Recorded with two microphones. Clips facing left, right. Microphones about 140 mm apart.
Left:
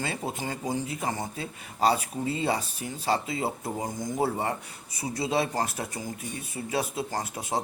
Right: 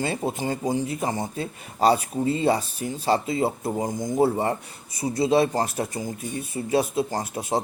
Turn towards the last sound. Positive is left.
turn(degrees=-25)  # may be behind; listen again after turning